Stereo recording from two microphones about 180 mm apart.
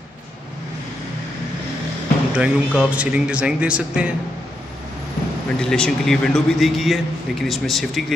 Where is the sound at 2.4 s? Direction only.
5° right (ahead or behind).